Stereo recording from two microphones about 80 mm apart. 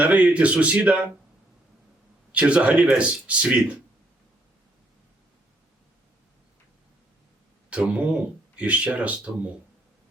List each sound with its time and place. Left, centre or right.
0.0 s speech: centre
2.3 s speech: centre
7.7 s speech: centre